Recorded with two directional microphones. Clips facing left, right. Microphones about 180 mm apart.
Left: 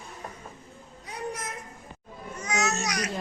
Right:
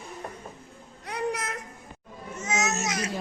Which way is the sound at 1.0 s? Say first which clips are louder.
Right 5 dB; 75° right (ahead or behind).